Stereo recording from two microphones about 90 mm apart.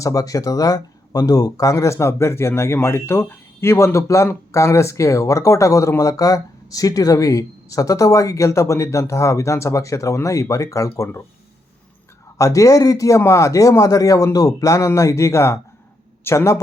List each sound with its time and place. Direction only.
0.0 s speech: 40° left (ahead or behind)
12.4 s speech: 35° left (ahead or behind)